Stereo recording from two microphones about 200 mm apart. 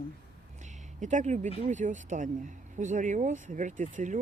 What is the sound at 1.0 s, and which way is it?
Speech, 35° right (ahead or behind).